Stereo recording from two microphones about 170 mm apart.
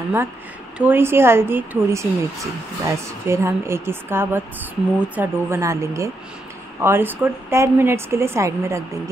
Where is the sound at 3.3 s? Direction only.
15° right (ahead or behind).